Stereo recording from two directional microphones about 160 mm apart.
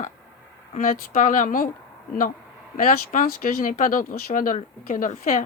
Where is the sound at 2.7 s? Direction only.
60° left (ahead or behind).